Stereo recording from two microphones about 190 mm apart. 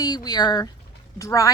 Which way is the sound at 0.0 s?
20° left (ahead or behind).